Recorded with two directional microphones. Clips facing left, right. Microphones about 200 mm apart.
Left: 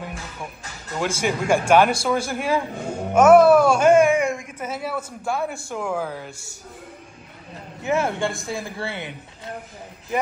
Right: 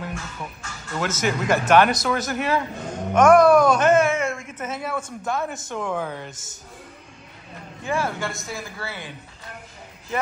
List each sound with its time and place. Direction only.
1.0 s a man's voice: 10° left (ahead or behind)
7.8 s speech: 20° left (ahead or behind)